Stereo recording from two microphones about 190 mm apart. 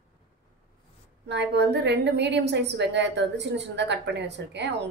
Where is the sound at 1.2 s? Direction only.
65° right (ahead or behind).